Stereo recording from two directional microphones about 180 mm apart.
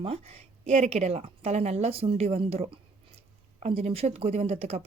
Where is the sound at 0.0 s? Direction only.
35° right (ahead or behind).